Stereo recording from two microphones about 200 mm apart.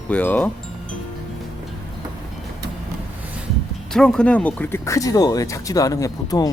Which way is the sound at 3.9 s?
5° left (ahead or behind).